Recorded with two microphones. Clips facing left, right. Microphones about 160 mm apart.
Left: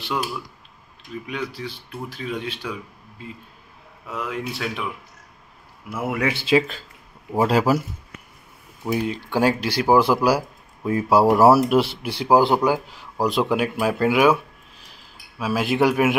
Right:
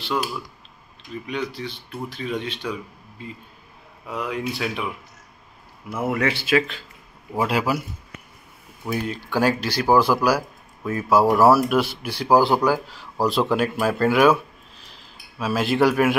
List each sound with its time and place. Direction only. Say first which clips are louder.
0.1 s speech: right 1 dB; 5° left (ahead or behind)
5.9 s speech: right 1 dB; 10° left (ahead or behind)
6.3 s speech: left 2 dB; 25° left (ahead or behind)
7.3 s a man's voice: left 4 dB; 40° left (ahead or behind)
8.8 s a man's voice: left 3 dB; 20° left (ahead or behind)